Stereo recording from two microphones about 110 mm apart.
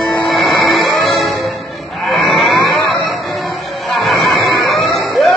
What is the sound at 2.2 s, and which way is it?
Vehicle, centre (ahead or behind).